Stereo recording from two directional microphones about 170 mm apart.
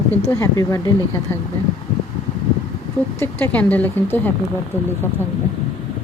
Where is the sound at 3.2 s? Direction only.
10° left (ahead or behind).